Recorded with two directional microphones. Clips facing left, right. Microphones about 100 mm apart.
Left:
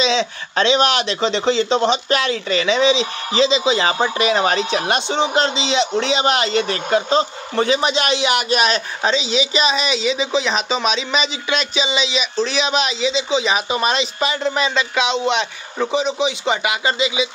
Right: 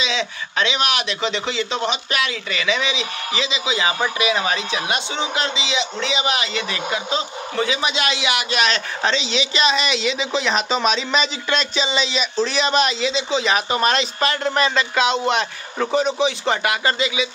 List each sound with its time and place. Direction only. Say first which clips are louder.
0.0 s speech: left 6 dB; 30° left (ahead or behind)
8.6 s speech: left 2 dB; 10° left (ahead or behind)